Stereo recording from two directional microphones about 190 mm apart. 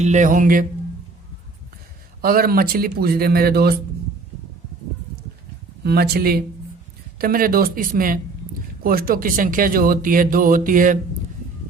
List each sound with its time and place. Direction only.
0.0 s speech: 40° right (ahead or behind)
2.2 s speech: 50° right (ahead or behind)
5.8 s speech: 55° right (ahead or behind)